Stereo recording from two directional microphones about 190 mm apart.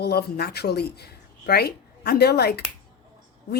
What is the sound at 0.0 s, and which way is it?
Speech, 55° left (ahead or behind).